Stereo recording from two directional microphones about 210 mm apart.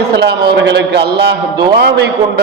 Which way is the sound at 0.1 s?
50° right (ahead or behind).